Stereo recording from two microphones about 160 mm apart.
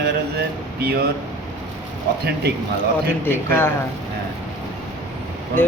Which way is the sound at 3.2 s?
15° left (ahead or behind).